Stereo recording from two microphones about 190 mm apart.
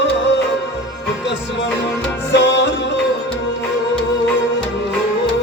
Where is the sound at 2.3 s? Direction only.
70° left (ahead or behind).